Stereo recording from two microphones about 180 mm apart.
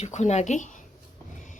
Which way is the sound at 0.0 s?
40° left (ahead or behind).